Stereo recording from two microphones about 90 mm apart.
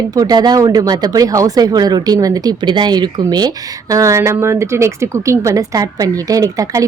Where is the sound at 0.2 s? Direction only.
50° right (ahead or behind).